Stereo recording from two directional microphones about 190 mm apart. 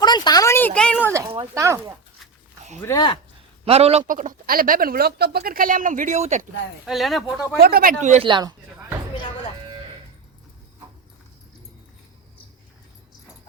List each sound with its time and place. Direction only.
0.0 s a sound: 20° left (ahead or behind)
1.1 s speech: 15° right (ahead or behind)
2.8 s speech: 20° left (ahead or behind)
3.7 s speech: 35° right (ahead or behind)
6.8 s speech: centre (ahead or behind)
7.6 s speech: 50° right (ahead or behind)
8.3 s speech: 20° right (ahead or behind)